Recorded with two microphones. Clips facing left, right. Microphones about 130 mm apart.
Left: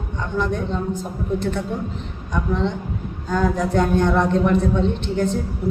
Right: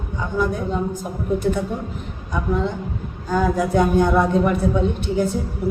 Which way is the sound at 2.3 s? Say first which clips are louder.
Even; 5° right (ahead or behind).